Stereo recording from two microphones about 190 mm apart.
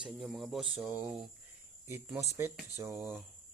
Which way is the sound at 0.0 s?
Centre (ahead or behind).